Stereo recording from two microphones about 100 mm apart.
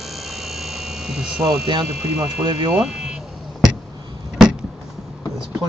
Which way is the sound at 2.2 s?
50° right (ahead or behind).